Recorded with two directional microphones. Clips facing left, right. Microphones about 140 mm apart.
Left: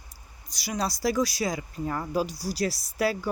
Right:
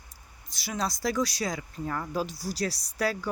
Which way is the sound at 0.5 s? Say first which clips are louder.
Left 2 dB; centre (ahead or behind).